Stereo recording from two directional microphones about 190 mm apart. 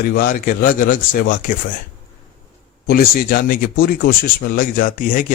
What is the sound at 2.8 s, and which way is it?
Speech, 50° left (ahead or behind).